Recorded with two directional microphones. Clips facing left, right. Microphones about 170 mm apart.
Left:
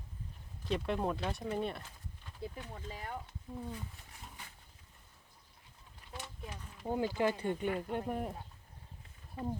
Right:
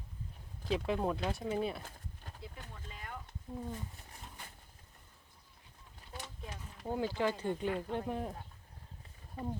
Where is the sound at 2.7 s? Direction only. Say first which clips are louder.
Left 5 dB; 35° left (ahead or behind).